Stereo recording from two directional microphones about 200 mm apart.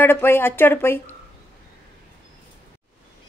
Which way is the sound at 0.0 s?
10° left (ahead or behind).